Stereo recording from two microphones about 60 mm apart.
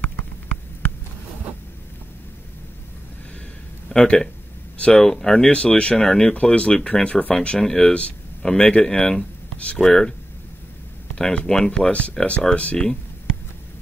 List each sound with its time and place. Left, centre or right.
3.9 s speech: centre
8.5 s speech: centre
8.8 s speech: centre
11.1 s speech: centre
11.9 s speech: left